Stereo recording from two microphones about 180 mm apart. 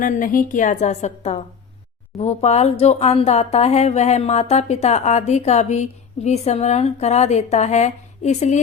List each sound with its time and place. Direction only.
0.0 s a woman's voice: 50° left (ahead or behind)